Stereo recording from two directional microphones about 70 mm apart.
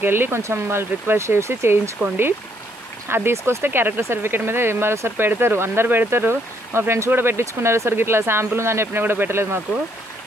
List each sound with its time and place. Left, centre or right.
0.0 s speech: right
2.0 s speech: right
3.1 s speech: right